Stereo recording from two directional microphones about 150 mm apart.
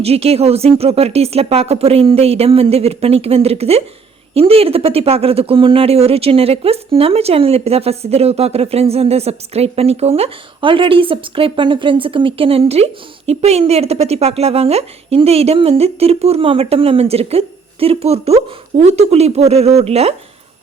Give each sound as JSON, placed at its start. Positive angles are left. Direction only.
{"t": 0.0, "sound": "speech", "side_deg": -40}